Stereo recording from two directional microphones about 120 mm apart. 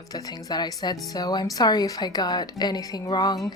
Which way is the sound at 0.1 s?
30° left (ahead or behind).